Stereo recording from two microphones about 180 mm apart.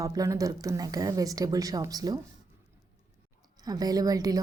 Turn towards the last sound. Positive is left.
turn(degrees=-20)  # may be behind; listen again after turning